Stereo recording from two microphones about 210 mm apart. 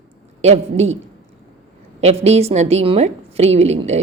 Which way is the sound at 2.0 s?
30° right (ahead or behind).